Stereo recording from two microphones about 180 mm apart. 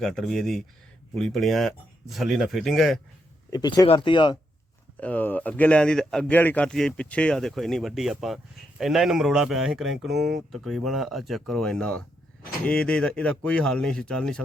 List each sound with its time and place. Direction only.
0.0 s speech: centre (ahead or behind)
3.5 s speech: 20° left (ahead or behind)
4.9 s speech: 10° left (ahead or behind)